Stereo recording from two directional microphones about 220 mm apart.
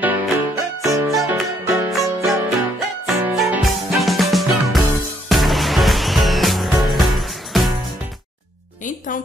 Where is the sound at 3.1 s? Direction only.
10° right (ahead or behind).